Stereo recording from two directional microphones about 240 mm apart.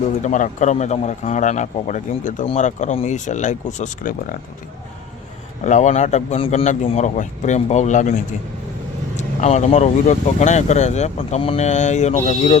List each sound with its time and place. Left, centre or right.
0.2 s speech: left
5.6 s speech: left